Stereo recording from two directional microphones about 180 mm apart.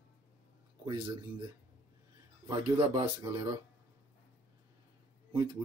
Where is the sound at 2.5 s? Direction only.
30° right (ahead or behind).